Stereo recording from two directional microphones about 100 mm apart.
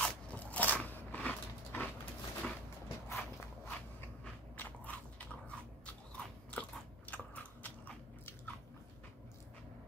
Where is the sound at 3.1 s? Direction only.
25° left (ahead or behind).